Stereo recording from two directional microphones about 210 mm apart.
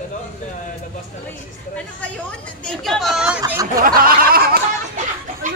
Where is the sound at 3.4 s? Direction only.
15° right (ahead or behind).